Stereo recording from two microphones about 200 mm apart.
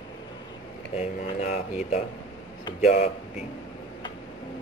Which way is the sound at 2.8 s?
35° left (ahead or behind).